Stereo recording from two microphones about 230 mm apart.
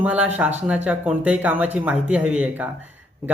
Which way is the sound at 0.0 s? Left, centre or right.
Centre.